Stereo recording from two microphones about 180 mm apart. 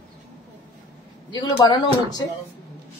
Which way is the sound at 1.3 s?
25° left (ahead or behind).